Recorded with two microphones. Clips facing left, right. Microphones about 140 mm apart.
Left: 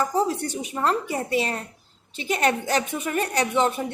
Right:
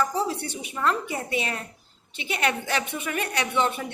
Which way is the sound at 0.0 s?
45° left (ahead or behind).